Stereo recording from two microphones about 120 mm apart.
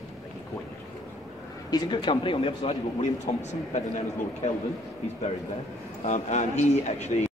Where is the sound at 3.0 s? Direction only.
70° left (ahead or behind).